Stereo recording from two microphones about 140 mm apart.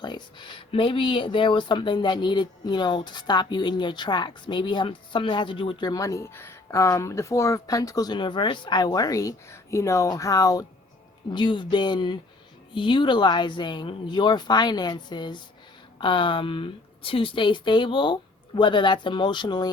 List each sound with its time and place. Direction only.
0.0 s speech: 35° left (ahead or behind)